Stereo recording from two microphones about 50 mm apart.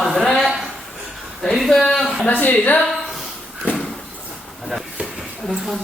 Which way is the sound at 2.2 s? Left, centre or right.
Left.